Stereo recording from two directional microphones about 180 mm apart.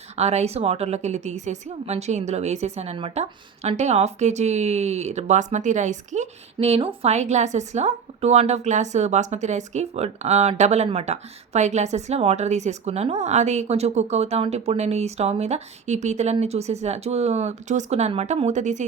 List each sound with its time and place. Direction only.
0.2 s a woman's voice: 35° right (ahead or behind)